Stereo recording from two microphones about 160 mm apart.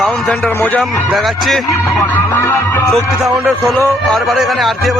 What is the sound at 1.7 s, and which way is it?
A man's voice, 20° left (ahead or behind).